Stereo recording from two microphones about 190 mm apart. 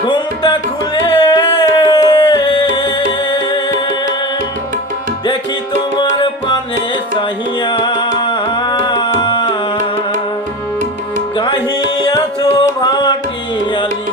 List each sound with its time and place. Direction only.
0.0 s tabla: 25° left (ahead or behind)
1.0 s music: 20° left (ahead or behind)
6.0 s music: 25° left (ahead or behind)
11.3 s music: 25° left (ahead or behind)